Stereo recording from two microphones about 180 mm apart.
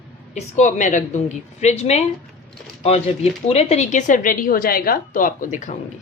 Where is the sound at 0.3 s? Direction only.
40° left (ahead or behind).